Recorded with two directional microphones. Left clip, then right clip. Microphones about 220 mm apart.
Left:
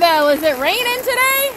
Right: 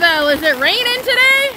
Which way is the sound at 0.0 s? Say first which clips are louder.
Even; 5° right (ahead or behind).